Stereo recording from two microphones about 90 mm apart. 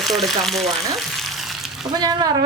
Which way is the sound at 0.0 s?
Centre (ahead or behind).